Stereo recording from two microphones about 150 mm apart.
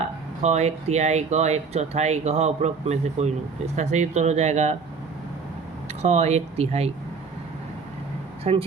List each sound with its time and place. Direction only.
0.0 s speech: 50° right (ahead or behind)
6.0 s speech: 45° right (ahead or behind)
8.4 s speech: 45° right (ahead or behind)